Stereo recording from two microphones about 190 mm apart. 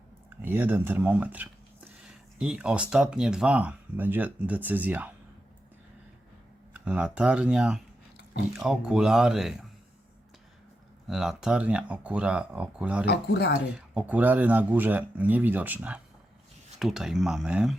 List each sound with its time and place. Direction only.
0.4 s speech: 10° right (ahead or behind)
6.7 s speech: 5° right (ahead or behind)
11.1 s speech: 5° right (ahead or behind)
13.1 s speech: 60° left (ahead or behind)
13.7 s speech: 5° right (ahead or behind)